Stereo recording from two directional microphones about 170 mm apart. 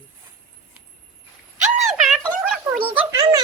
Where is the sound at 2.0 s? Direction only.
Centre (ahead or behind).